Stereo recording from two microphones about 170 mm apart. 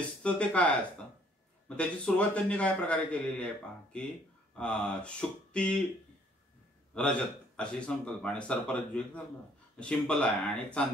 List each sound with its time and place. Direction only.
0.2 s speech: 5° left (ahead or behind)
6.9 s speech: 5° left (ahead or behind)